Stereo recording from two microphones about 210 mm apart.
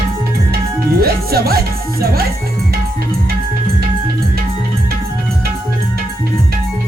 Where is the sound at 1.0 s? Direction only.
45° right (ahead or behind).